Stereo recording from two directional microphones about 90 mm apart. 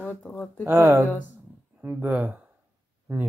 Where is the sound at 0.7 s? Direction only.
25° right (ahead or behind).